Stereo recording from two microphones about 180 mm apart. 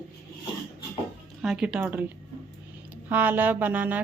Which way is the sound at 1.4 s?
5° right (ahead or behind).